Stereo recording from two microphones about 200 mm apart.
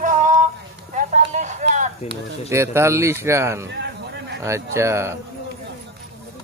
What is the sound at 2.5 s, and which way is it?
Speech, 15° right (ahead or behind).